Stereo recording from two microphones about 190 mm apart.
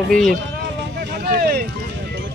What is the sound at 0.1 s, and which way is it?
Speech, centre (ahead or behind).